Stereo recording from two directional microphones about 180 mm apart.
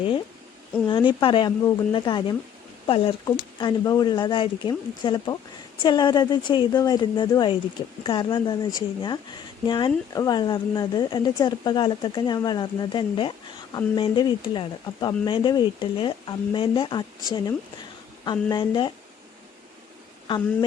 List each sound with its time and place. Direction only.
0.9 s speech: 25° left (ahead or behind)
20.2 s speech: 25° left (ahead or behind)